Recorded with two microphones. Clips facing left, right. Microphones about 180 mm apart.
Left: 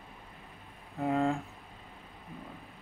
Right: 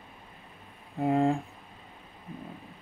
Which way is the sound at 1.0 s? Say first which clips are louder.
Right 4 dB; 30° right (ahead or behind).